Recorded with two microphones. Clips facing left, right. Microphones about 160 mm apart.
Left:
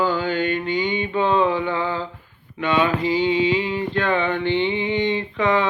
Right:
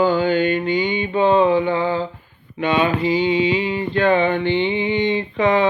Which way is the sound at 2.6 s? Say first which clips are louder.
Right 2 dB; 15° right (ahead or behind).